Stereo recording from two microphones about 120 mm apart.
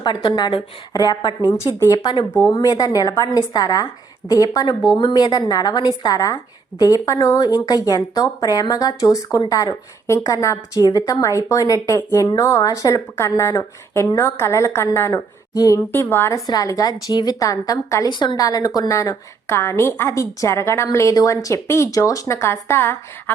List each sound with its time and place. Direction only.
0.0 s a woman's voice: 40° left (ahead or behind)
15.9 s a woman's voice: 20° left (ahead or behind)
16.5 s a woman's voice: 30° left (ahead or behind)